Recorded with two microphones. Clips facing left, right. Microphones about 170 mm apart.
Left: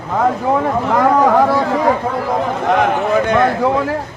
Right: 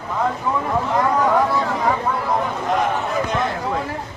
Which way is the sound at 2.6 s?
70° left (ahead or behind).